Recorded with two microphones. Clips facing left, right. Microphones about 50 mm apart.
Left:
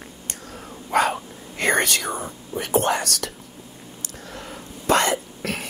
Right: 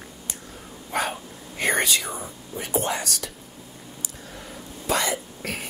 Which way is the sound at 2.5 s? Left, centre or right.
Left.